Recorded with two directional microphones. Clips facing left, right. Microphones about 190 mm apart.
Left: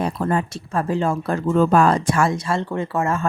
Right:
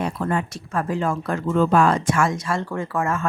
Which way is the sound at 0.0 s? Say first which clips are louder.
Left 2 dB; 35° left (ahead or behind).